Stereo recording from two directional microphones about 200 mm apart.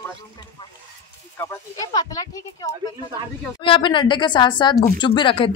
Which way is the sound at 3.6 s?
25° left (ahead or behind).